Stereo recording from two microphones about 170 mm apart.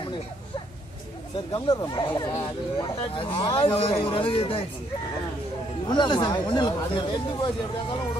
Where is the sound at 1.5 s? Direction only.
25° left (ahead or behind).